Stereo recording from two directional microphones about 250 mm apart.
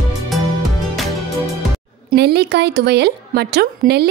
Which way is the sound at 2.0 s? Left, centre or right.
Right.